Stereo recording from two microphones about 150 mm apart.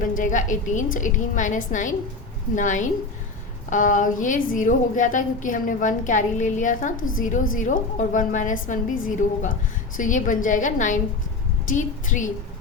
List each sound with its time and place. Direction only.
0.0 s a woman's voice: 60° left (ahead or behind)